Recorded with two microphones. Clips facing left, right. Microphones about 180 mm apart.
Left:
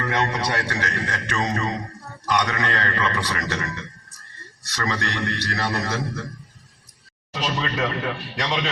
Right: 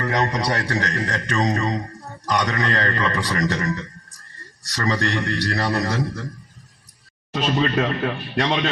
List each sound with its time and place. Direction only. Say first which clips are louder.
0.0 s a man's voice: right 2 dB; 40° right (ahead or behind)
7.3 s a man's voice: right 5 dB; 55° right (ahead or behind)